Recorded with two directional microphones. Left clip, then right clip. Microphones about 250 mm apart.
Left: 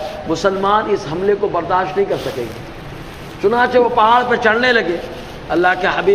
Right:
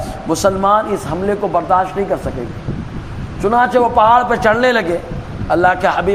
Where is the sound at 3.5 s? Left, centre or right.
Right.